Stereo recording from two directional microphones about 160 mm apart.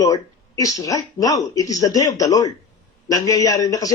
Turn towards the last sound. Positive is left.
turn(degrees=20)  # may be behind; listen again after turning